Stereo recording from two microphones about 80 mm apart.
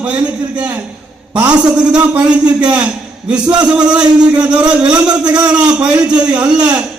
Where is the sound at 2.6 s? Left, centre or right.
Centre.